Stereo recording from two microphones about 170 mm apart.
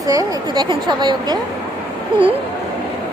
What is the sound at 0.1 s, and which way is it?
Speech, 20° right (ahead or behind).